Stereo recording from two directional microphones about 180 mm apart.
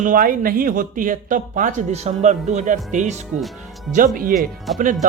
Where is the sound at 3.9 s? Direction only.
Centre (ahead or behind).